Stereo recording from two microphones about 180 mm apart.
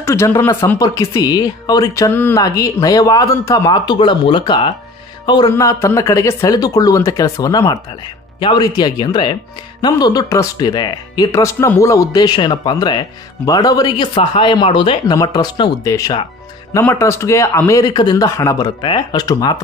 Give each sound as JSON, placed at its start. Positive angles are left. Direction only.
{"t": 0.0, "sound": "speech", "side_deg": 15}
{"t": 5.2, "sound": "music", "side_deg": 25}
{"t": 5.5, "sound": "speech", "side_deg": 15}